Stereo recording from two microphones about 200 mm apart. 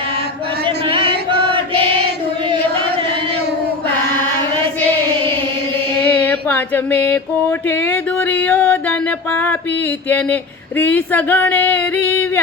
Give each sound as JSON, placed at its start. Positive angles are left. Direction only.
{"t": 0.6, "sound": "chant", "side_deg": -25}
{"t": 6.0, "sound": "female singing", "side_deg": 10}
{"t": 7.7, "sound": "music", "side_deg": 10}